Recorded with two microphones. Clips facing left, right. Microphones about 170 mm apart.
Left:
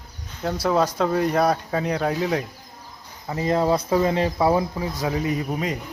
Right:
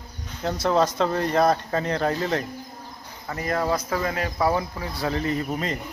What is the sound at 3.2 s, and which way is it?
Speech, 20° left (ahead or behind).